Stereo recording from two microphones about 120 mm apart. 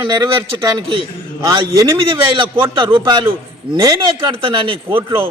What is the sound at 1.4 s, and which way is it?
Speech, 30° right (ahead or behind).